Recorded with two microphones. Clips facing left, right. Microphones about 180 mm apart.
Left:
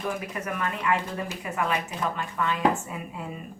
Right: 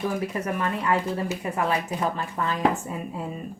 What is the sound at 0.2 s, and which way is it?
Speech, 35° right (ahead or behind).